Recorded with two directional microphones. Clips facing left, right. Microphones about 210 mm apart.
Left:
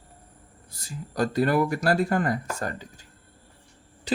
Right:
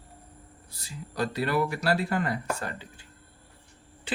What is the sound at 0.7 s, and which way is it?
Speech, 45° left (ahead or behind).